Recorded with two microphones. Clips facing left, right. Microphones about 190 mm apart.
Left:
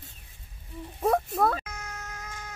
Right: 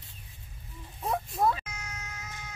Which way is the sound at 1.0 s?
65° left (ahead or behind).